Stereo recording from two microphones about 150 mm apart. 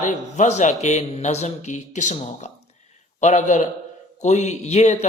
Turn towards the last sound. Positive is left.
turn(degrees=50)  # may be behind; listen again after turning